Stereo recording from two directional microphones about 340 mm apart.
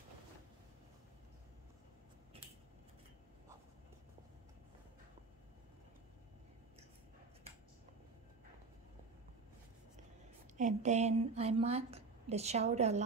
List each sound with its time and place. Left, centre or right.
10.6 s a woman's voice: centre